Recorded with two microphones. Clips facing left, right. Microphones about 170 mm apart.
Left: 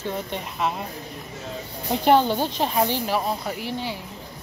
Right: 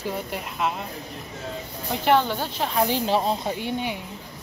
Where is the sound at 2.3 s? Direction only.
20° left (ahead or behind).